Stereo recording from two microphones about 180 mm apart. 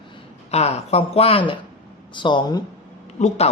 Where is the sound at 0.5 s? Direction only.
35° left (ahead or behind).